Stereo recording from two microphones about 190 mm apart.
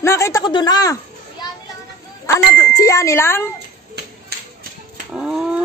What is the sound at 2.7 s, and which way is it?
Speech, 15° left (ahead or behind).